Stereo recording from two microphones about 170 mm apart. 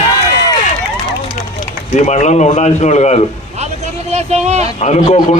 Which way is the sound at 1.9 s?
45° left (ahead or behind).